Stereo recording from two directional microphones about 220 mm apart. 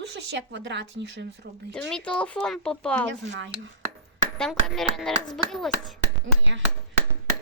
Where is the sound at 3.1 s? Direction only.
55° right (ahead or behind).